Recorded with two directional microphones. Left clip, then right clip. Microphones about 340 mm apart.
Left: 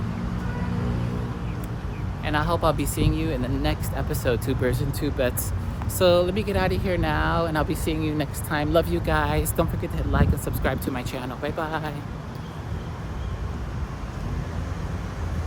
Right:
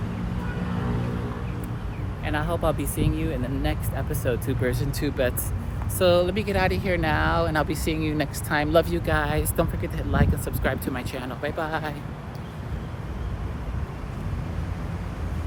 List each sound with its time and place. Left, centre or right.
2.2 s speech: centre